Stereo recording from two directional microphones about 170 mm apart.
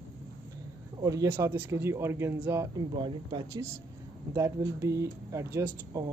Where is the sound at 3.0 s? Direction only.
25° right (ahead or behind).